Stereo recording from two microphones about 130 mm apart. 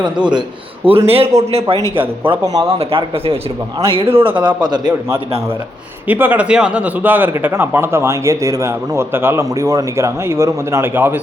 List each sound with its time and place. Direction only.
0.9 s speech: 45° right (ahead or behind)
2.4 s speech: 30° right (ahead or behind)
2.6 s speech: 50° right (ahead or behind)
4.4 s a man's voice: 35° right (ahead or behind)
6.1 s speech: 15° right (ahead or behind)